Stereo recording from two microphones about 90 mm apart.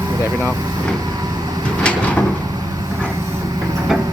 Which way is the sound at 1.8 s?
15° left (ahead or behind).